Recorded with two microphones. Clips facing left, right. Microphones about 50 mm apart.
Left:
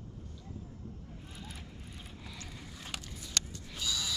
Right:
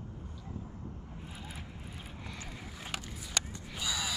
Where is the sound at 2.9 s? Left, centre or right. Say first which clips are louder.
Right 2 dB; centre.